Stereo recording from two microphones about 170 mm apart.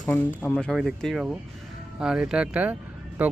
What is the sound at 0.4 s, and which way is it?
Speech, 5° left (ahead or behind).